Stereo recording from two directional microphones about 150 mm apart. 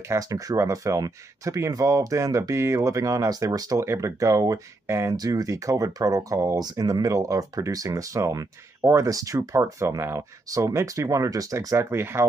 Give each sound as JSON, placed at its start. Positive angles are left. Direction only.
{"t": 0.1, "sound": "speech", "side_deg": -25}